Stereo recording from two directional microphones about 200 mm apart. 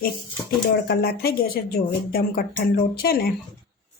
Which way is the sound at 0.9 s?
50° left (ahead or behind).